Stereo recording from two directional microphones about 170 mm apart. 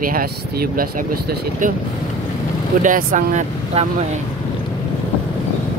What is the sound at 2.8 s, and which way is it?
Speech, 50° right (ahead or behind).